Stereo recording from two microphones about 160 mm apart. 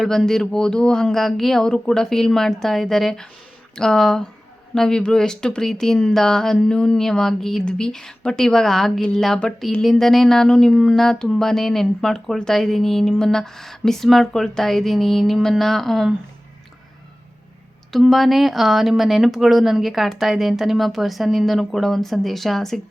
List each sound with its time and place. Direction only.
0.0 s speech: 5° left (ahead or behind)
17.9 s speech: centre (ahead or behind)